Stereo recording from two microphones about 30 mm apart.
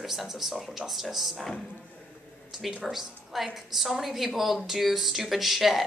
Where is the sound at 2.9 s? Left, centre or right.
Centre.